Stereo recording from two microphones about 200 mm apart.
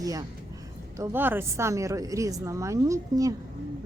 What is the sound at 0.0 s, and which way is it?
A woman's voice, 15° right (ahead or behind).